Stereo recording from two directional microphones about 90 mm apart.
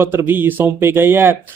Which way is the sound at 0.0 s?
25° right (ahead or behind).